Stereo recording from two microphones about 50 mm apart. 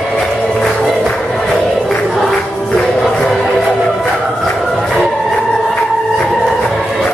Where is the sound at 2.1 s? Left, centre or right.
Centre.